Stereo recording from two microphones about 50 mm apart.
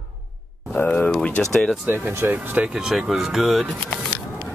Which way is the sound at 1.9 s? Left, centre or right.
Right.